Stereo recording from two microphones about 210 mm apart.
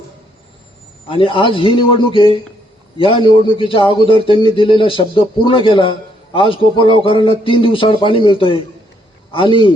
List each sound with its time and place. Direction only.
1.0 s a man's voice: 25° left (ahead or behind)